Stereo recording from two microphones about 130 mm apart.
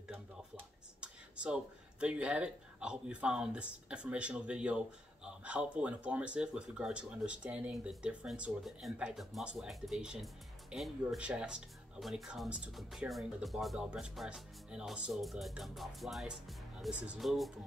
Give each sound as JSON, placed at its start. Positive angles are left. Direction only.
{"t": 1.0, "sound": "speech", "side_deg": -10}